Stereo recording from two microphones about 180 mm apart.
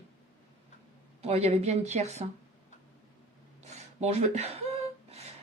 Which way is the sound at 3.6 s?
35° right (ahead or behind).